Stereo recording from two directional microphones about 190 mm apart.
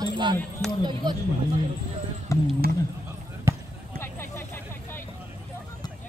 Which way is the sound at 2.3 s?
15° left (ahead or behind).